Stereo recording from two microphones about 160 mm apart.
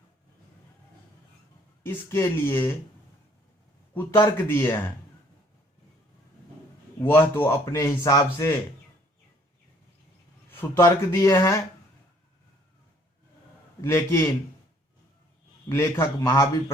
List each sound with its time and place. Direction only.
1.8 s a man's voice: 15° left (ahead or behind)
4.4 s a man's voice: 10° left (ahead or behind)
7.0 s a man's voice: 10° left (ahead or behind)
10.5 s a man's voice: 15° left (ahead or behind)
13.8 s a man's voice: 15° left (ahead or behind)
15.7 s a man's voice: 15° left (ahead or behind)